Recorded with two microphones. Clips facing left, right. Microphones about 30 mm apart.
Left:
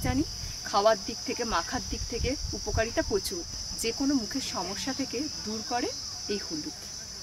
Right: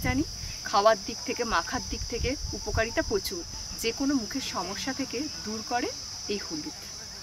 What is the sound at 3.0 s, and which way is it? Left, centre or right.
Speech, centre.